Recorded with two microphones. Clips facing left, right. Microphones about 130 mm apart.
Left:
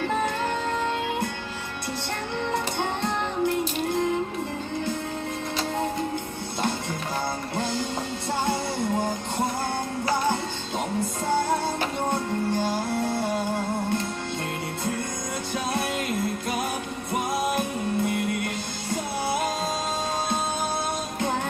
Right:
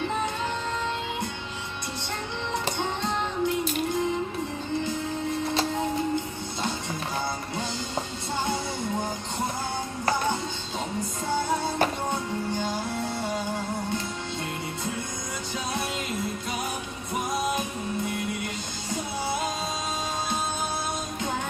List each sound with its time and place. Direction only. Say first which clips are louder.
0.0 s music: left 3 dB; 55° left (ahead or behind)
2.5 s music: left 1 dB; 55° left (ahead or behind)
7.5 s music: left 4 dB; 55° left (ahead or behind)
12.1 s music: left 3 dB; 55° left (ahead or behind)
15.5 s music: left 4 dB; 55° left (ahead or behind)